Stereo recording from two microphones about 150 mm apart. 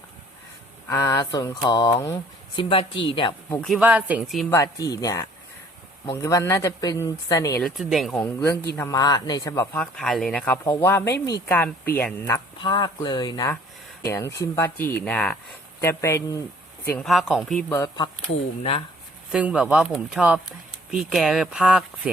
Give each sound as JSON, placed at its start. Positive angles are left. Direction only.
{"t": 0.9, "sound": "speech", "side_deg": 20}
{"t": 2.6, "sound": "speech", "side_deg": 35}
{"t": 3.8, "sound": "speech", "side_deg": -10}
{"t": 4.4, "sound": "speech", "side_deg": 20}
{"t": 7.6, "sound": "speech", "side_deg": 0}
{"t": 8.2, "sound": "speech", "side_deg": 15}
{"t": 9.7, "sound": "speech", "side_deg": 5}
{"t": 10.6, "sound": "speech", "side_deg": 15}
{"t": 12.6, "sound": "speech", "side_deg": 30}
{"t": 17.0, "sound": "speech", "side_deg": 0}
{"t": 17.7, "sound": "speech", "side_deg": 25}
{"t": 19.3, "sound": "speech", "side_deg": -5}